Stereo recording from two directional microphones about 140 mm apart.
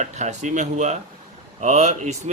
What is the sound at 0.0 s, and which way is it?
Speech, 55° right (ahead or behind).